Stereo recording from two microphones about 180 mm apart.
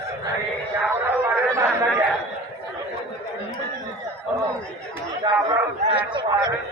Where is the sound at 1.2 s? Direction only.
15° right (ahead or behind).